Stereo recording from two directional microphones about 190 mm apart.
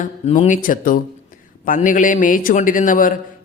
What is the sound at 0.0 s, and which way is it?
Speech, 40° left (ahead or behind).